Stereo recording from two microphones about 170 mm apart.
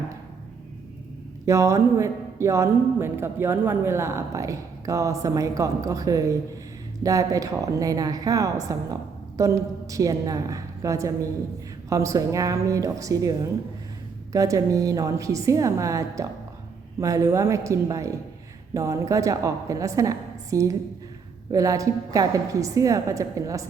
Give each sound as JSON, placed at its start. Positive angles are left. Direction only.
{"t": 1.5, "sound": "a woman's voice", "side_deg": -15}